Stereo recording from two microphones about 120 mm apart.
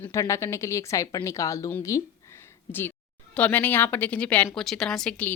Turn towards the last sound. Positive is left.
turn(degrees=5)  # may be behind; listen again after turning